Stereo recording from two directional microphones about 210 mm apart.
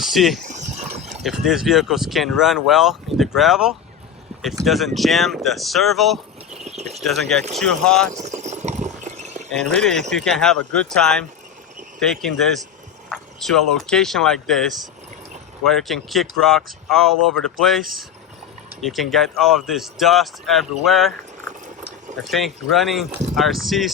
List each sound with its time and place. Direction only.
0.0 s speech: centre (ahead or behind)
0.4 s a sound: 35° right (ahead or behind)
1.2 s speech: centre (ahead or behind)
6.7 s speech: 30° right (ahead or behind)
6.9 s speech: centre (ahead or behind)
8.1 s a sound: 35° right (ahead or behind)
9.6 s speech: 5° left (ahead or behind)
22.3 s speech: centre (ahead or behind)